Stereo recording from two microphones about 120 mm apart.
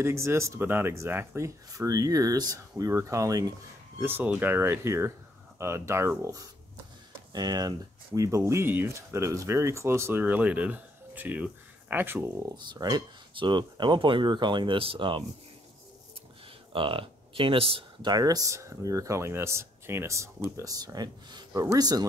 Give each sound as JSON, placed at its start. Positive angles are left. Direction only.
{"t": 0.0, "sound": "speech", "side_deg": -20}
{"t": 4.0, "sound": "speech", "side_deg": -15}
{"t": 7.3, "sound": "speech", "side_deg": -35}
{"t": 12.4, "sound": "speech", "side_deg": -30}
{"t": 16.7, "sound": "speech", "side_deg": -45}
{"t": 18.1, "sound": "speech", "side_deg": -30}